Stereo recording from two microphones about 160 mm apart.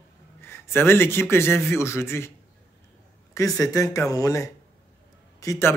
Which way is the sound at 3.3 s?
20° left (ahead or behind).